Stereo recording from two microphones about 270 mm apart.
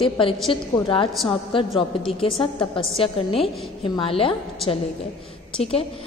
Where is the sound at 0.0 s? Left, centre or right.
Centre.